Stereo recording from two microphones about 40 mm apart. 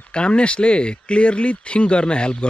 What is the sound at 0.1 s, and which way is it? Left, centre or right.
Speech, left.